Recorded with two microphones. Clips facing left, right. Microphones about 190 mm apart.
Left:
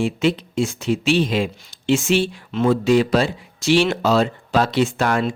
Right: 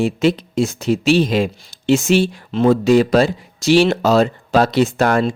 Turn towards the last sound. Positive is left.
turn(degrees=-40)  # may be behind; listen again after turning